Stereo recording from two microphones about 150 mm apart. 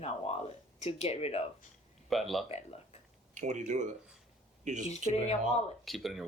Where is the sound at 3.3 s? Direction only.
55° right (ahead or behind).